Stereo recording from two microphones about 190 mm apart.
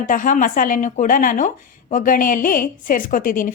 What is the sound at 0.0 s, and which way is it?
Speech, 45° left (ahead or behind).